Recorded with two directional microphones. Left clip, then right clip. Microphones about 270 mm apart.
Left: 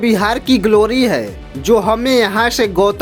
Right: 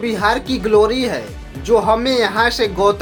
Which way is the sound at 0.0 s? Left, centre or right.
Left.